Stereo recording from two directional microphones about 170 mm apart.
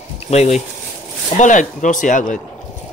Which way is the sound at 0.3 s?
40° left (ahead or behind).